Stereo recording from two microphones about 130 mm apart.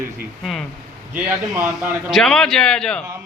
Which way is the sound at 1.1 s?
15° right (ahead or behind).